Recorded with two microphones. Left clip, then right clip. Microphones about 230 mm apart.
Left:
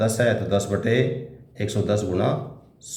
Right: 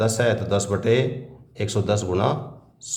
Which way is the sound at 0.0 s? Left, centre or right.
Right.